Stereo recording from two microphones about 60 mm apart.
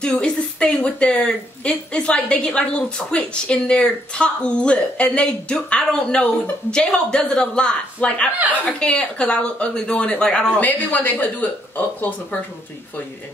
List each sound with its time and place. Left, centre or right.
0.0 s speech: centre
10.6 s speech: left